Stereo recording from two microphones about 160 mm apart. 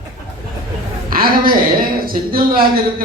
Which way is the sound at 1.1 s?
65° right (ahead or behind).